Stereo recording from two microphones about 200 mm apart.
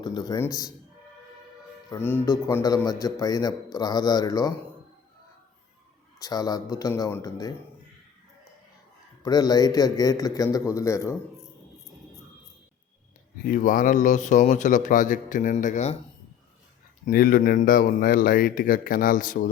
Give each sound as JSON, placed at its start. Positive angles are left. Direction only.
{"t": 0.0, "sound": "speech", "side_deg": 20}
{"t": 1.9, "sound": "a man's voice", "side_deg": 10}
{"t": 6.1, "sound": "a man's voice", "side_deg": 20}
{"t": 9.2, "sound": "a man's voice", "side_deg": 20}
{"t": 13.4, "sound": "speech", "side_deg": 40}
{"t": 17.1, "sound": "speech", "side_deg": 45}